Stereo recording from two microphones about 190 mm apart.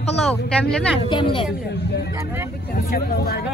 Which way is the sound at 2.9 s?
50° left (ahead or behind).